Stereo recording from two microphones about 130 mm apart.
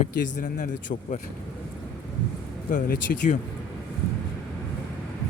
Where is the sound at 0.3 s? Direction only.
75° left (ahead or behind).